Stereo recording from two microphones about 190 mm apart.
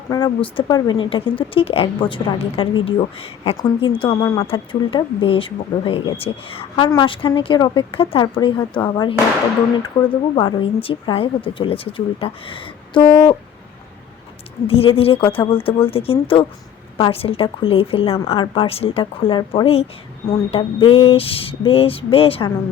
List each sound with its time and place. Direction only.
0.1 s speech: 25° left (ahead or behind)
14.7 s speech: 30° left (ahead or behind)